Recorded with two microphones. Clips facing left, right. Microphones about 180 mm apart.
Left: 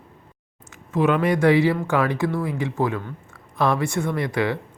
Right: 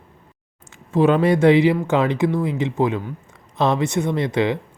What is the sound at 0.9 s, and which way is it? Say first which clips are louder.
Speech: right 4 dB; 30° right (ahead or behind).